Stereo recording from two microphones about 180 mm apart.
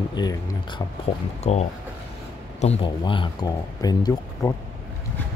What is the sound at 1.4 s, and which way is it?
Speech, 35° left (ahead or behind).